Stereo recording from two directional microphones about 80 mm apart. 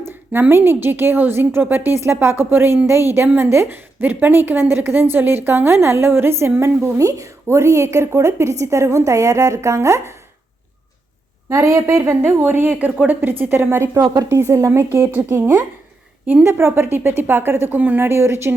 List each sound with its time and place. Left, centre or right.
0.0 s a woman's voice: right
11.4 s a woman's voice: right
13.9 s speech: right
14.3 s a woman's voice: right
16.5 s a woman's voice: right